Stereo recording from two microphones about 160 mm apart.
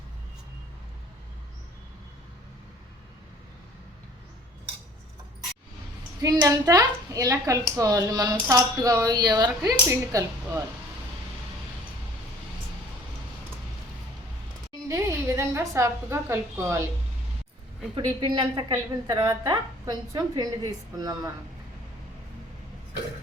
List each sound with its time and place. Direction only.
6.2 s a woman's voice: 20° right (ahead or behind)
14.7 s a sound: 20° right (ahead or behind)
17.9 s a woman's voice: 30° right (ahead or behind)